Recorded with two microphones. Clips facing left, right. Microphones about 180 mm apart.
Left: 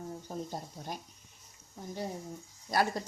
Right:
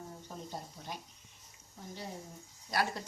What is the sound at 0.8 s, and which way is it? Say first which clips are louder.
Speech: left 4 dB; 45° left (ahead or behind).